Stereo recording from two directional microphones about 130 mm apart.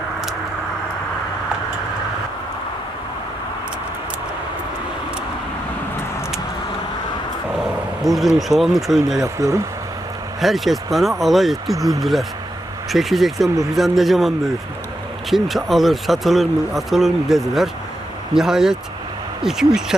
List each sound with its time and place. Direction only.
8.0 s speech: centre (ahead or behind)
9.2 s speech: 25° right (ahead or behind)
10.4 s speech: centre (ahead or behind)